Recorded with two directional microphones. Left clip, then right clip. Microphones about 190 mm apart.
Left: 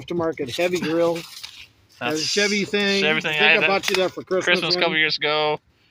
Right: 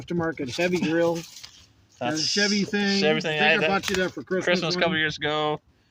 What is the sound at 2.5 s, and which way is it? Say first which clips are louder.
Speech: left 4 dB; 60° right (ahead or behind).